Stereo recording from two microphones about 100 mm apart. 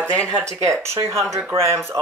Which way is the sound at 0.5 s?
30° right (ahead or behind).